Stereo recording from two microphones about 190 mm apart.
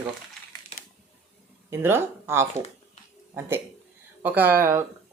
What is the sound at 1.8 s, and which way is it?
Speech, 10° right (ahead or behind).